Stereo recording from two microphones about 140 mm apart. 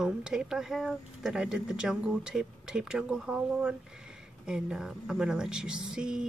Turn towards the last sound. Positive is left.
turn(degrees=-5)  # may be behind; listen again after turning